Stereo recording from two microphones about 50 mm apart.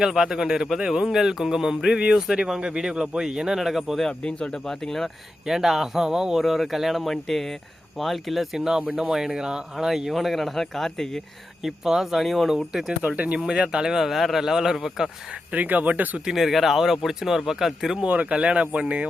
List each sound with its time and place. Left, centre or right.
0.0 s speech: centre
4.2 s speech: left
5.5 s speech: centre
11.6 s speech: centre
13.0 s speech: right
13.9 s speech: centre
15.5 s speech: right
16.1 s speech: centre
18.1 s speech: right